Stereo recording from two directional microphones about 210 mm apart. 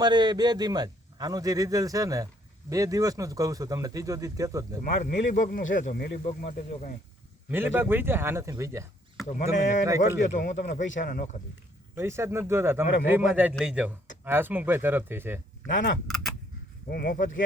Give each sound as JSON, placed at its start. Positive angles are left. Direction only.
{"t": 0.0, "sound": "a man's voice", "side_deg": -20}
{"t": 4.8, "sound": "speech", "side_deg": 45}
{"t": 6.2, "sound": "speech", "side_deg": 35}
{"t": 7.5, "sound": "a man's voice", "side_deg": -10}
{"t": 9.3, "sound": "speech", "side_deg": 35}
{"t": 11.9, "sound": "a man's voice", "side_deg": -10}
{"t": 15.6, "sound": "speech", "side_deg": 40}
{"t": 16.0, "sound": "speech", "side_deg": 0}
{"t": 16.9, "sound": "speech", "side_deg": 45}